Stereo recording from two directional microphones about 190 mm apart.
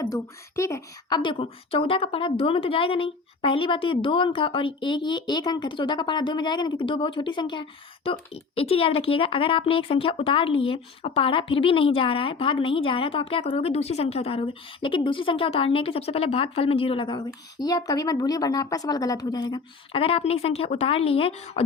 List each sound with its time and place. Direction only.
0.0 s speech: 15° left (ahead or behind)
1.2 s a woman's voice: 25° left (ahead or behind)